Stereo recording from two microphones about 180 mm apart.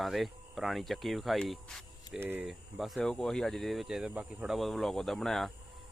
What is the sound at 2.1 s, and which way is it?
Speech, 10° right (ahead or behind).